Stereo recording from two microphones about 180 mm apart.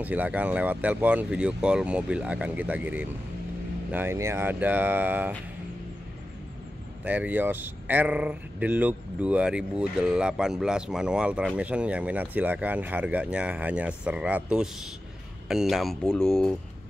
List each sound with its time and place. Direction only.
0.0 s speech: 10° right (ahead or behind)
7.1 s speech: 10° right (ahead or behind)